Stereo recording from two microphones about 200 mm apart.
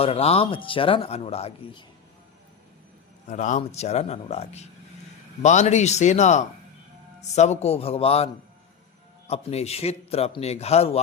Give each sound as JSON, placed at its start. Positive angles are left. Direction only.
{"t": 0.0, "sound": "speech", "side_deg": 30}
{"t": 3.2, "sound": "a man's voice", "side_deg": 40}